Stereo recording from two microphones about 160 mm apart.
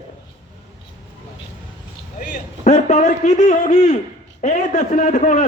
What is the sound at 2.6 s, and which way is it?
A man's voice, 50° left (ahead or behind).